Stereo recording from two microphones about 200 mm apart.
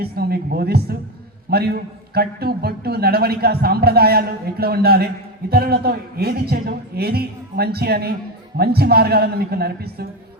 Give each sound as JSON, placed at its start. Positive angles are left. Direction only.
{"t": 0.0, "sound": "a man's voice", "side_deg": -50}